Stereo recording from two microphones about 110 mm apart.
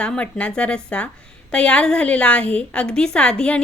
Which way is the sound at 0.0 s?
10° left (ahead or behind).